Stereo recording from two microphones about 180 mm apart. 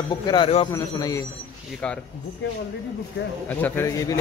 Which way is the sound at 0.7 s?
20° left (ahead or behind).